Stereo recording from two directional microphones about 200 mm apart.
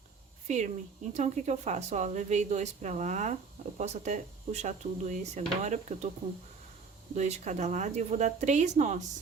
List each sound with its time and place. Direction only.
0.4 s speech: 35° right (ahead or behind)
7.2 s speech: 35° right (ahead or behind)